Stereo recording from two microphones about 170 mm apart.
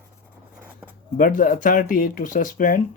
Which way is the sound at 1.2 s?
55° left (ahead or behind).